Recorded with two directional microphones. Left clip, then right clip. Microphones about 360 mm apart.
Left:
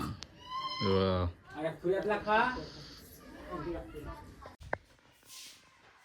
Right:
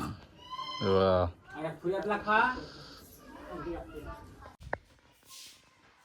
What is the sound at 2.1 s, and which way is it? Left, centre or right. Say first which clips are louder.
Speech: right 3 dB; centre.